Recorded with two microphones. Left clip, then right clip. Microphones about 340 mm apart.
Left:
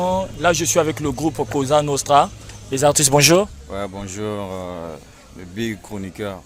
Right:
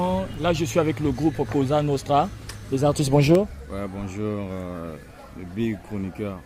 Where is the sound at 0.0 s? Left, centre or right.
Left.